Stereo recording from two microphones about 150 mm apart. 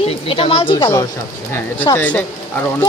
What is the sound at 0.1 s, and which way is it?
Speech, 40° left (ahead or behind).